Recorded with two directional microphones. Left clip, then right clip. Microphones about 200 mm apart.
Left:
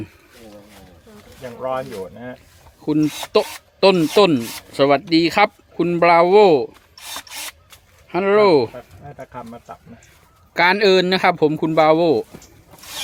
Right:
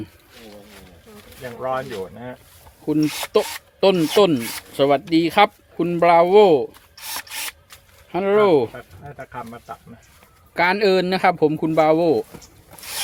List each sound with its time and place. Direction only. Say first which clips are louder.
1.5 s speech: even; 20° right (ahead or behind)
2.8 s speech: left 1 dB; 20° left (ahead or behind)
6.9 s rub: right 1 dB; 20° right (ahead or behind)
8.1 s speech: left 2 dB; 20° left (ahead or behind)
10.5 s speech: left 3 dB; 20° left (ahead or behind)